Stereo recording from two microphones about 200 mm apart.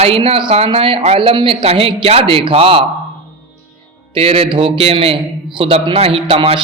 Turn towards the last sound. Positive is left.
turn(degrees=-25)  # may be behind; listen again after turning